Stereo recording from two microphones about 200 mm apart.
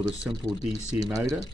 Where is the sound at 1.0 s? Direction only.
15° right (ahead or behind).